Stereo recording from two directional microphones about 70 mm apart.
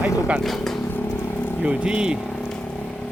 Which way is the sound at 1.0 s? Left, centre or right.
Left.